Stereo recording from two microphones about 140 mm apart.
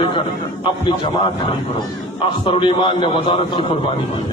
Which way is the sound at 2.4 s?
40° left (ahead or behind).